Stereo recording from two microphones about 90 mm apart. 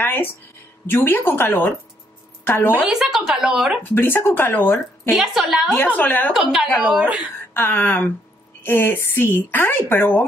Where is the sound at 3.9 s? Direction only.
25° left (ahead or behind).